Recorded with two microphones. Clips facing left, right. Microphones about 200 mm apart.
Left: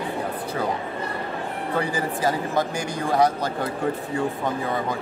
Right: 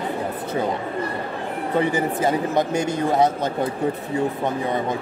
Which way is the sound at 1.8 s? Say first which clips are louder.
Right 5 dB; 20° right (ahead or behind).